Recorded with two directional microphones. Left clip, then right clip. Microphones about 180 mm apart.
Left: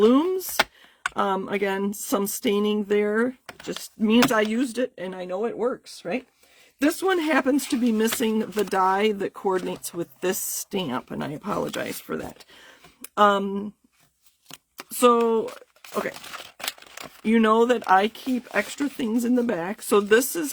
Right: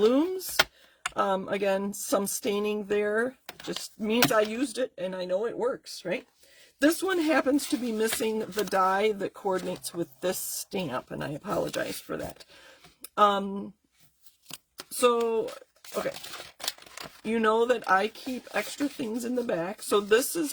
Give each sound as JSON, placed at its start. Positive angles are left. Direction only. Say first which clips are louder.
{"t": 0.0, "sound": "speech", "louder": "left 5 dB", "side_deg": 45}
{"t": 6.7, "sound": "speech", "louder": "left 3 dB", "side_deg": 40}
{"t": 12.6, "sound": "a sound", "louder": "left 4 dB", "side_deg": 45}
{"t": 14.4, "sound": "shuffling cards", "louder": "left 2 dB", "side_deg": 0}
{"t": 14.9, "sound": "speech", "louder": "left 5 dB", "side_deg": 45}
{"t": 17.2, "sound": "speech", "louder": "left 5 dB", "side_deg": 45}